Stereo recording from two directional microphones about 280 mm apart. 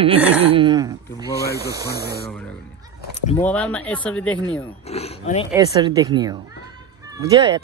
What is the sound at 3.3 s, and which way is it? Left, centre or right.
Speech, centre.